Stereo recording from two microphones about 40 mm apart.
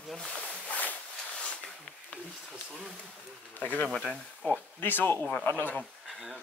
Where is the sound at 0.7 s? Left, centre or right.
Left.